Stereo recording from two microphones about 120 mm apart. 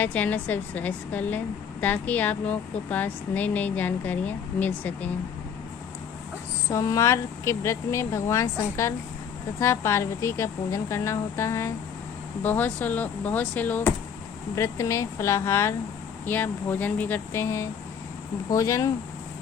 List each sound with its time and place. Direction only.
0.0 s a woman's voice: 15° left (ahead or behind)
6.7 s a woman's voice: 25° left (ahead or behind)
14.5 s a woman's voice: 25° left (ahead or behind)